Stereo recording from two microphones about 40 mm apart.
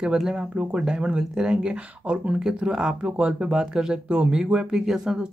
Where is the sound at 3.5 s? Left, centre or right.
Centre.